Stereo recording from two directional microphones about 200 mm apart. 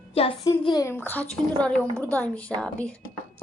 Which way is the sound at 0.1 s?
30° left (ahead or behind).